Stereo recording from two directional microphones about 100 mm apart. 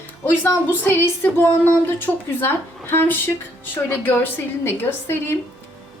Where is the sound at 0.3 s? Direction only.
20° left (ahead or behind).